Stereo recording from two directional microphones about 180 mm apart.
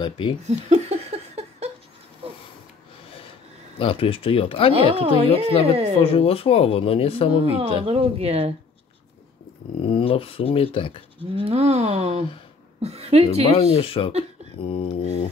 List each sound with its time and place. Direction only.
0.0 s speech: 25° left (ahead or behind)
0.5 s laughter: 35° right (ahead or behind)
3.7 s speech: 30° left (ahead or behind)
4.7 s a woman's voice: 35° right (ahead or behind)
5.9 s speech: 30° left (ahead or behind)
7.5 s a woman's voice: 35° right (ahead or behind)
9.8 s speech: 30° left (ahead or behind)
11.3 s a woman's voice: 35° right (ahead or behind)
13.6 s speech: 35° left (ahead or behind)